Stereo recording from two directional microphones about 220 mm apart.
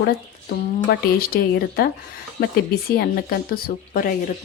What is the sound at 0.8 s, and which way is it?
Speech, 45° left (ahead or behind).